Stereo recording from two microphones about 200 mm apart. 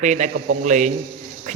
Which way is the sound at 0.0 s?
35° right (ahead or behind).